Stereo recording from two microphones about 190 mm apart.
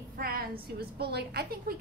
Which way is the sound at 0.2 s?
55° right (ahead or behind).